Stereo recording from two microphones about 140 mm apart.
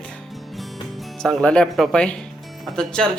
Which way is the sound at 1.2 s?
5° left (ahead or behind).